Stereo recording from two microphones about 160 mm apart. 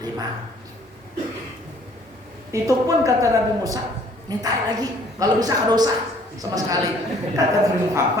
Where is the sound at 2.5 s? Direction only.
20° right (ahead or behind).